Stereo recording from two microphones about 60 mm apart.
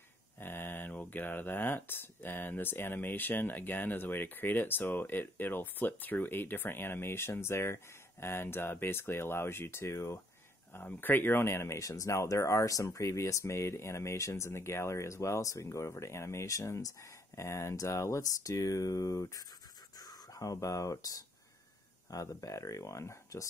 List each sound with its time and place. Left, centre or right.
0.4 s speech: left
10.7 s speech: left
11.8 s speech: left
20.0 s speech: left